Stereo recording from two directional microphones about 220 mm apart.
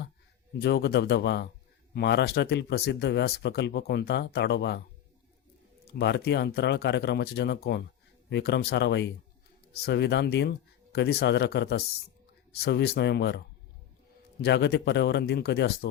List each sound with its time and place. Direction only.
0.6 s speech: 50° left (ahead or behind)
5.9 s speech: 50° left (ahead or behind)
14.4 s speech: 50° left (ahead or behind)